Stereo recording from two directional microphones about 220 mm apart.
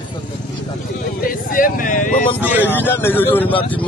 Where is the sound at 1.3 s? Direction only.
40° left (ahead or behind).